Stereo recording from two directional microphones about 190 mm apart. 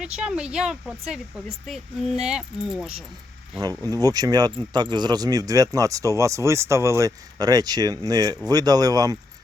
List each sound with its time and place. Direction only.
0.0 s speech: 5° right (ahead or behind)
3.6 s speech: 20° right (ahead or behind)